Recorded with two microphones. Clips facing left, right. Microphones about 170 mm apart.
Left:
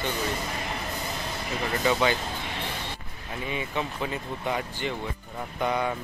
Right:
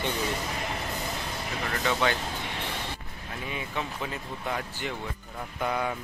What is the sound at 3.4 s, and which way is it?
Speech, centre (ahead or behind).